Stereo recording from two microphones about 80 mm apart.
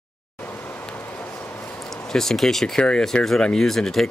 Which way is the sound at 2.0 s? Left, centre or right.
Centre.